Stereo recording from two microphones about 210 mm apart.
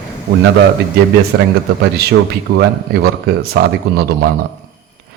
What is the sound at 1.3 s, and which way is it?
Speech, 55° right (ahead or behind).